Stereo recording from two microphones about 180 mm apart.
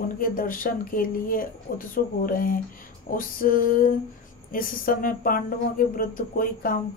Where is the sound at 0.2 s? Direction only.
50° left (ahead or behind).